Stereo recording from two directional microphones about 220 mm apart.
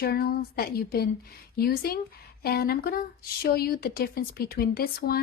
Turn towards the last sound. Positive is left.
turn(degrees=45)  # may be behind; listen again after turning